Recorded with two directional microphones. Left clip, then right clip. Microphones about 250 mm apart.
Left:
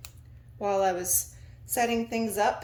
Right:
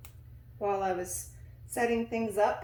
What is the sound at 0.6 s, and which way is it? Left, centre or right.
A woman's voice, left.